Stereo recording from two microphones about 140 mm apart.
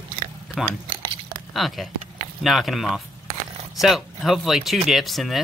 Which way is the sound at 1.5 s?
Centre (ahead or behind).